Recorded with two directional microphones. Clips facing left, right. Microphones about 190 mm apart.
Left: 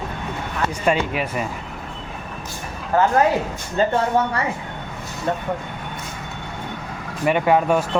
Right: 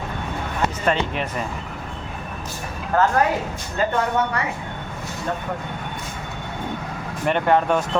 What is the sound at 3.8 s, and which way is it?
Speech, 30° left (ahead or behind).